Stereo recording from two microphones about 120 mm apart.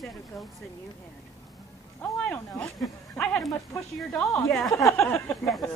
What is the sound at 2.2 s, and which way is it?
A woman's voice, 10° left (ahead or behind).